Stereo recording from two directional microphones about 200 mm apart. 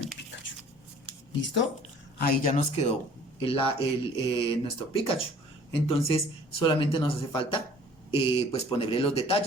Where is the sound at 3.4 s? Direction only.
25° left (ahead or behind).